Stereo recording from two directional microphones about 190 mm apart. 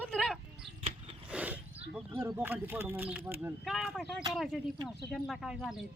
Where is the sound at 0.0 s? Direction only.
5° left (ahead or behind).